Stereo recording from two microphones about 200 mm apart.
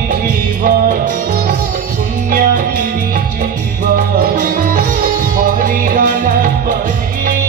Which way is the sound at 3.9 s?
40° right (ahead or behind).